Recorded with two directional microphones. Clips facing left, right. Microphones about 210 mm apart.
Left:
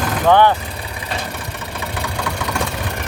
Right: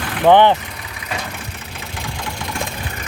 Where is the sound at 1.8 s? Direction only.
65° left (ahead or behind).